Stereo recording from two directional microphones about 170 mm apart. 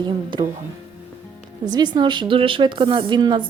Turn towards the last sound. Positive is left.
turn(degrees=-25)  # may be behind; listen again after turning